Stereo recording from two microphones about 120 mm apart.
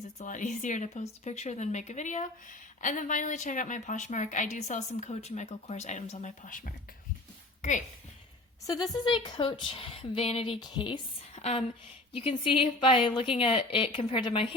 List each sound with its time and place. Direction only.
0.2 s speech: 90° left
8.6 s a woman's voice: 30° left (ahead or behind); by 10.6 s 55° left (ahead or behind)
10.6 s speech: 40° left (ahead or behind)
11.4 s a woman's voice: 70° left (ahead or behind)
12.4 s a woman's voice: 50° left (ahead or behind)